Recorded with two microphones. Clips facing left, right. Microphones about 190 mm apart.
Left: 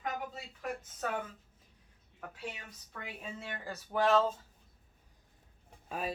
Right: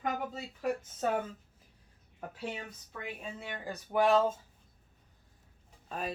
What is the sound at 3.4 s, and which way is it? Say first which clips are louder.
Speech: right 2 dB; 15° right (ahead or behind).